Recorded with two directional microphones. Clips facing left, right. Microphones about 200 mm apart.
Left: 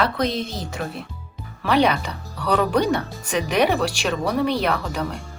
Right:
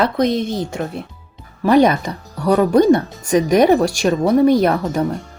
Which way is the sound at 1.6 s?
45° right (ahead or behind).